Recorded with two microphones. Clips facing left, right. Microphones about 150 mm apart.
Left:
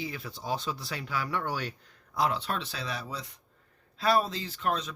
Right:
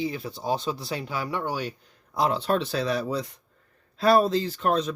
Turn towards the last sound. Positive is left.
turn(degrees=-40)  # may be behind; listen again after turning